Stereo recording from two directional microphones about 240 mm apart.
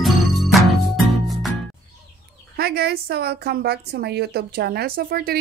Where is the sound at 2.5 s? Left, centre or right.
Right.